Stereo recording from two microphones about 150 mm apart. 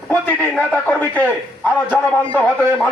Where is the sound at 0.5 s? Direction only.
10° left (ahead or behind).